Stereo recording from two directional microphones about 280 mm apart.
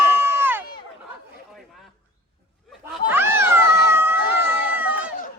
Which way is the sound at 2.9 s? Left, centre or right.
Centre.